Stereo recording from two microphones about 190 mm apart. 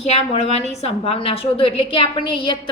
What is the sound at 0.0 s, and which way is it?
A woman's voice, 35° left (ahead or behind).